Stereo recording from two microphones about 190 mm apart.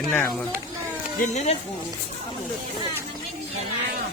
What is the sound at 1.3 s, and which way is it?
Speech, 35° left (ahead or behind).